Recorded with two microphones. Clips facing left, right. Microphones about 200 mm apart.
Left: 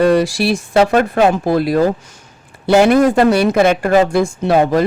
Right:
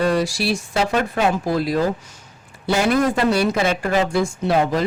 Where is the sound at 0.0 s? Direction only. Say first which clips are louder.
Left 7 dB; 60° left (ahead or behind).